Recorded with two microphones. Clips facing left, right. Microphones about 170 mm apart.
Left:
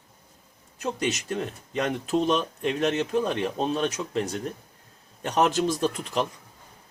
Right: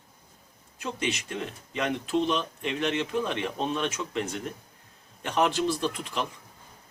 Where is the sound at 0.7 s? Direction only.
40° left (ahead or behind).